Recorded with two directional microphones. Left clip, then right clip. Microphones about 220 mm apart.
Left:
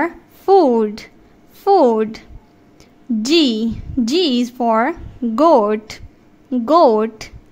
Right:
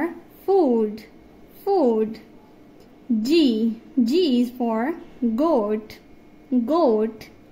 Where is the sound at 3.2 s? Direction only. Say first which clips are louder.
Left 4 dB; 35° left (ahead or behind).